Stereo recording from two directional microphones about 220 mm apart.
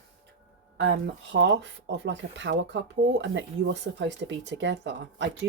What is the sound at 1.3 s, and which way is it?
Speech, 55° right (ahead or behind).